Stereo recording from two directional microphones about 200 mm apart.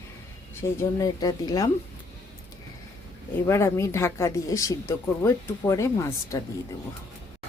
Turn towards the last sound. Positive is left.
turn(degrees=15)  # may be behind; listen again after turning